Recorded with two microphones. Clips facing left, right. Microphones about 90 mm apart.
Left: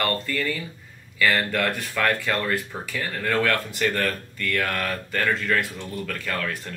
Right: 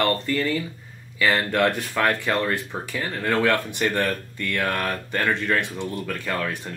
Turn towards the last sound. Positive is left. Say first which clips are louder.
# right 2 dB
turn(degrees=-20)  # may be behind; listen again after turning